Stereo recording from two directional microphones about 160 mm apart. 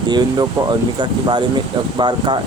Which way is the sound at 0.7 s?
30° right (ahead or behind).